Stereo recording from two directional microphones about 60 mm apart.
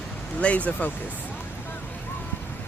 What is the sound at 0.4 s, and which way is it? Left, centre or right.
Speech, left.